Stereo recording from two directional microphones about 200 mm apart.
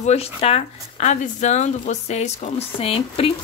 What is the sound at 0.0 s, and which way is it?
Speech, 30° left (ahead or behind).